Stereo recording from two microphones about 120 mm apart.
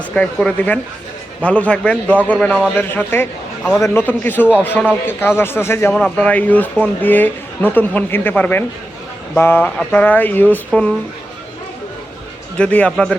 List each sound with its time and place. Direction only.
0.1 s speech: 5° left (ahead or behind)
5.9 s speech: 10° left (ahead or behind)
12.5 s speech: 10° left (ahead or behind)